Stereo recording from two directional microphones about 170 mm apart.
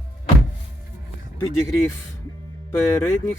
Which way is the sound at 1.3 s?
15° left (ahead or behind).